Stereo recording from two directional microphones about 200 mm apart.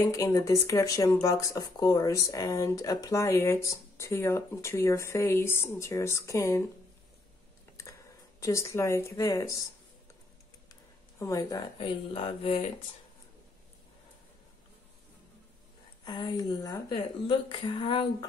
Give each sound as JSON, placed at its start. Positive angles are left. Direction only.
{"t": 0.0, "sound": "speech", "side_deg": 15}
{"t": 8.4, "sound": "speech", "side_deg": 15}
{"t": 10.7, "sound": "speech", "side_deg": 15}
{"t": 16.0, "sound": "speech", "side_deg": 20}